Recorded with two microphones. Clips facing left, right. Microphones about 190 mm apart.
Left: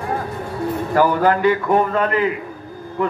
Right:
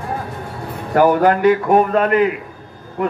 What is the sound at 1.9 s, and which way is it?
Speech, 65° right (ahead or behind).